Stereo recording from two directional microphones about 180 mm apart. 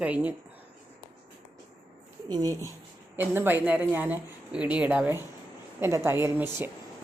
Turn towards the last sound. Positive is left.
turn(degrees=-15)  # may be behind; listen again after turning